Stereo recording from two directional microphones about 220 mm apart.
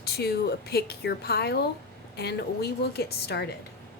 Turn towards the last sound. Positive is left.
turn(degrees=50)  # may be behind; listen again after turning